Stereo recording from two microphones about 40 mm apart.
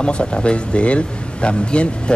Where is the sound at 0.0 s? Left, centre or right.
Left.